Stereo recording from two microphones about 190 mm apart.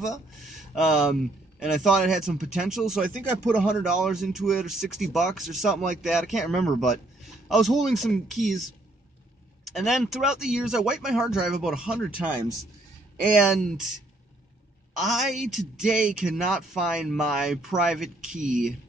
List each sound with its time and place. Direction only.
0.8 s speech: 5° right (ahead or behind)
9.7 s speech: centre (ahead or behind)
13.4 s speech: centre (ahead or behind)
15.0 s speech: centre (ahead or behind)
18.4 s speech: 45° right (ahead or behind)